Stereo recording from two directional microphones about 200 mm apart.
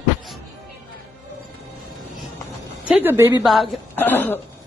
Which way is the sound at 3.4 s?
Centre (ahead or behind).